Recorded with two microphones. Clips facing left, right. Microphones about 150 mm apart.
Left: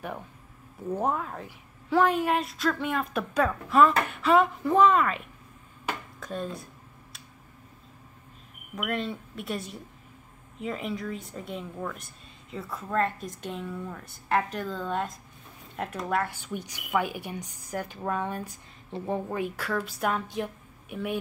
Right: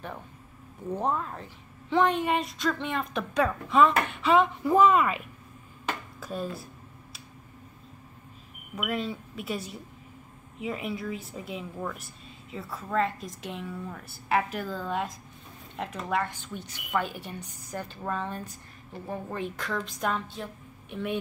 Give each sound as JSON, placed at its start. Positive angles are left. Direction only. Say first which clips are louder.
{"t": 0.8, "sound": "speech", "louder": "left 1 dB", "side_deg": 5}
{"t": 6.1, "sound": "a sound", "louder": "even", "side_deg": -5}
{"t": 8.7, "sound": "a woman's voice", "louder": "even", "side_deg": 0}
{"t": 18.9, "sound": "a woman's voice", "louder": "left 6 dB", "side_deg": 25}
{"t": 19.2, "sound": "a woman's voice", "louder": "left 2 dB", "side_deg": 10}